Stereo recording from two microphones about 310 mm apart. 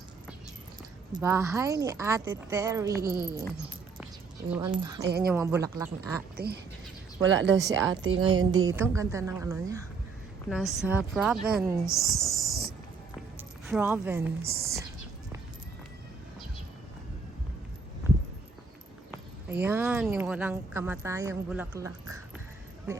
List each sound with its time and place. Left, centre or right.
1.1 s speech: centre
4.5 s speech: centre
5.0 s a woman's voice: right
5.3 s speech: centre
6.3 s a woman's voice: right
8.5 s speech: centre
13.7 s speech: centre
19.1 s speech: centre